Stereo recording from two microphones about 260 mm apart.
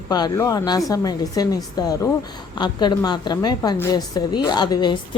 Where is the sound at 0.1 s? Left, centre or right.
Centre.